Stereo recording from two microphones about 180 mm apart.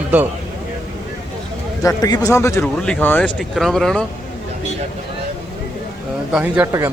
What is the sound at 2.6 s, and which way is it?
Speech, 5° left (ahead or behind).